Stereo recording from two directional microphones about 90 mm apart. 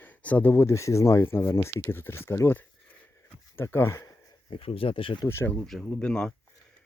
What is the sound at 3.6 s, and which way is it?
Speech, 25° left (ahead or behind).